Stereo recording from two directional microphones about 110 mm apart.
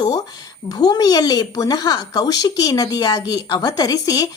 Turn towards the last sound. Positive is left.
turn(degrees=35)  # may be behind; listen again after turning